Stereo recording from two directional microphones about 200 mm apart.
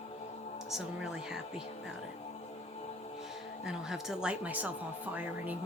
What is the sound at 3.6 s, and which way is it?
Speech, centre (ahead or behind).